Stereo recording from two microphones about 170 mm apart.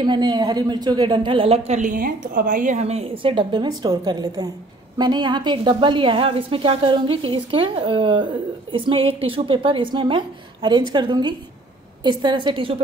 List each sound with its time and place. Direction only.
0.0 s a woman's voice: 25° right (ahead or behind)